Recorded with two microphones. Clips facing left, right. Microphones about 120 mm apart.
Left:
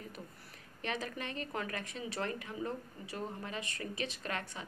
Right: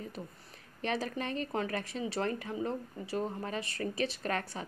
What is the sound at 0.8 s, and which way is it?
A woman's voice, 35° right (ahead or behind).